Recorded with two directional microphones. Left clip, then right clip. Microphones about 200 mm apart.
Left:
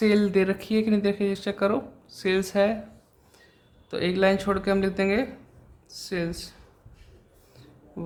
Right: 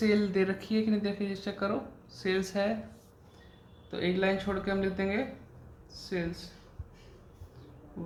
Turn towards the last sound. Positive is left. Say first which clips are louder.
# left 5 dB
turn(degrees=50)  # may be behind; listen again after turning